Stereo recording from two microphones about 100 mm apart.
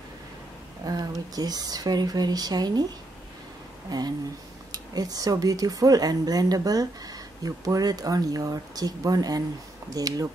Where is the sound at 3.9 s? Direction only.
40° right (ahead or behind).